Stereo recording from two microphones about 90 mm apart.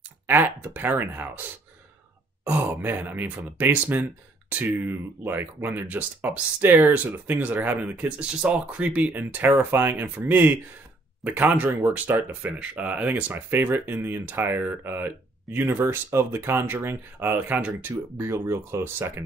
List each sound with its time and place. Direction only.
0.3 s speech: 20° right (ahead or behind)
2.4 s speech: 20° right (ahead or behind)
18.1 s speech: 30° right (ahead or behind)